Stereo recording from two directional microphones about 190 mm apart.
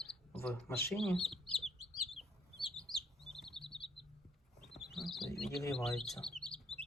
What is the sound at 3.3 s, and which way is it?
Chirp, centre (ahead or behind).